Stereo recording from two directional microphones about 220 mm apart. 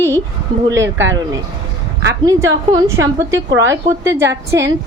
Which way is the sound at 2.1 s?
15° right (ahead or behind).